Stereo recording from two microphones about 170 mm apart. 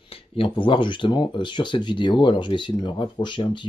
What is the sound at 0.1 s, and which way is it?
Speech, 30° left (ahead or behind).